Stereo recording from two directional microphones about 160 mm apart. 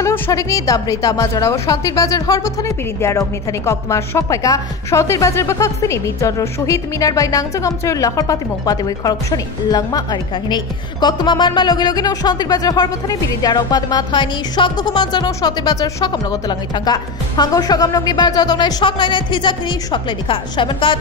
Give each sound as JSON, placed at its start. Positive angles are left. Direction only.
{"t": 0.0, "sound": "a woman's voice", "side_deg": 20}